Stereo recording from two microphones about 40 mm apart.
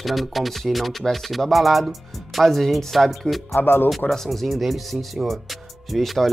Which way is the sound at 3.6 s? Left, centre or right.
Left.